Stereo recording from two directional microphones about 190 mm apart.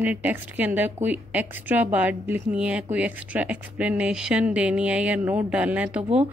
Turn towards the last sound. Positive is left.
turn(degrees=-5)  # may be behind; listen again after turning